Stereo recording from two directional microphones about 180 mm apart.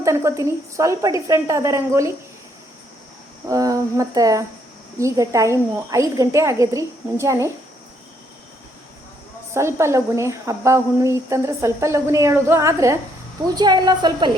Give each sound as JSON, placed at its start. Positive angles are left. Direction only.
{"t": 0.0, "sound": "a woman's voice", "side_deg": -15}
{"t": 3.5, "sound": "a woman's voice", "side_deg": -20}
{"t": 9.5, "sound": "a woman's voice", "side_deg": -15}